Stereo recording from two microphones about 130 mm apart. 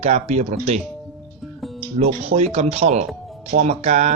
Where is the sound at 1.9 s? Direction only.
55° right (ahead or behind).